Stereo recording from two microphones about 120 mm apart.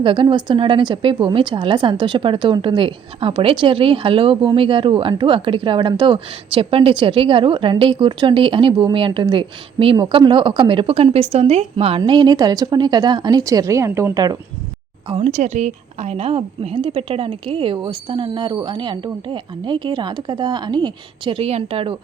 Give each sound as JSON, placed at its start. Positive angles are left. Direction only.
{"t": 0.0, "sound": "a woman's voice", "side_deg": -45}
{"t": 15.1, "sound": "a woman's voice", "side_deg": -80}
{"t": 21.3, "sound": "a woman's voice", "side_deg": -55}